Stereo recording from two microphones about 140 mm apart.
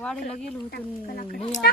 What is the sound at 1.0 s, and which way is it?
Speech, 75° left (ahead or behind).